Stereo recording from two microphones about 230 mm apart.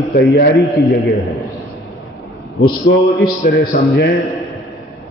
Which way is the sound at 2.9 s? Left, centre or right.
Left.